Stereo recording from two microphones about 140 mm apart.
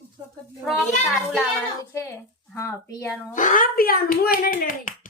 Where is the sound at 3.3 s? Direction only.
65° left (ahead or behind).